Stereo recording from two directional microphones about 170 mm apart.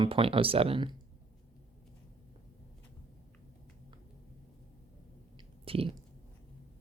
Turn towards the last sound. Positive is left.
turn(degrees=-35)  # may be behind; listen again after turning